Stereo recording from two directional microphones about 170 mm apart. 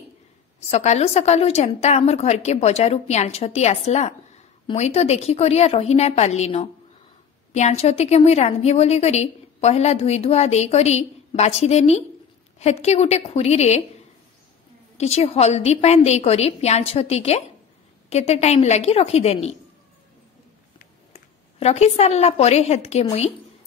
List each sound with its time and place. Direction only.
0.7 s a woman's voice: 40° left (ahead or behind)
15.0 s a woman's voice: 40° left (ahead or behind)
21.1 s a woman's voice: 40° left (ahead or behind)